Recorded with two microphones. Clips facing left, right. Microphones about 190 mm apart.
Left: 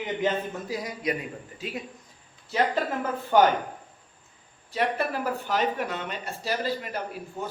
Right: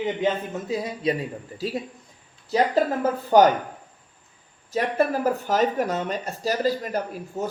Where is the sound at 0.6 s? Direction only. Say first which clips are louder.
Right 5 dB; 25° right (ahead or behind).